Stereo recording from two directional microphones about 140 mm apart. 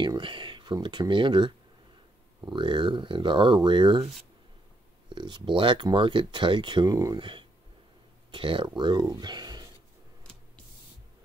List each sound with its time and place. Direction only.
0.0 s speech: 35° right (ahead or behind)
5.1 s speech: 35° right (ahead or behind)